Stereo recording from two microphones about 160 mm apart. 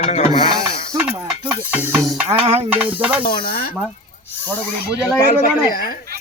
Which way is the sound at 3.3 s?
70° left (ahead or behind).